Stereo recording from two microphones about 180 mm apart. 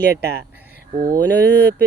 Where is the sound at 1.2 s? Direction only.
70° right (ahead or behind).